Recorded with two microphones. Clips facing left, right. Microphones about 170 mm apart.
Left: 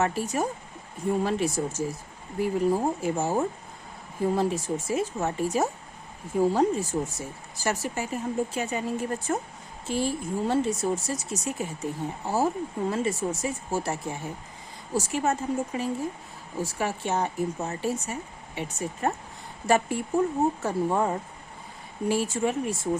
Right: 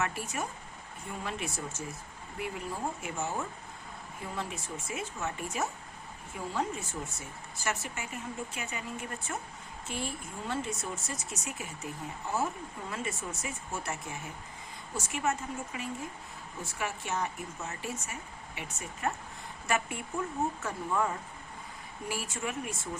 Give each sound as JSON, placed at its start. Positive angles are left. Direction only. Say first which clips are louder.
{"t": 0.0, "sound": "speech", "louder": "left 8 dB", "side_deg": 30}